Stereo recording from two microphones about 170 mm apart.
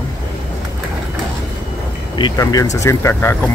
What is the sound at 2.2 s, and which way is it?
Speech, 20° left (ahead or behind).